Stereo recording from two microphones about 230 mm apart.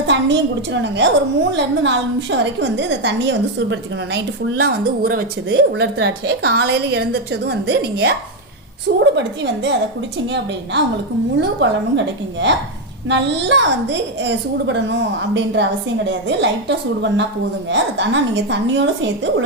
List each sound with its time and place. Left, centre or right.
0.1 s a woman's voice: right
9.1 s a woman's voice: right
11.3 s a woman's voice: right